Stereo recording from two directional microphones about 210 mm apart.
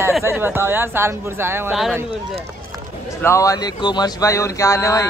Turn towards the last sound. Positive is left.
turn(degrees=15)  # may be behind; listen again after turning